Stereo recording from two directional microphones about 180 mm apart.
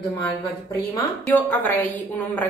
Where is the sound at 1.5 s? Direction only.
10° left (ahead or behind).